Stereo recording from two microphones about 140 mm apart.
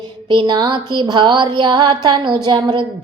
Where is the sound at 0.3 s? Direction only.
35° right (ahead or behind).